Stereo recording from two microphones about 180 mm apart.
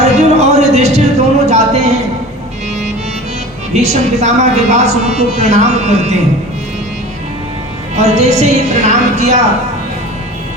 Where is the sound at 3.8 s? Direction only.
40° right (ahead or behind).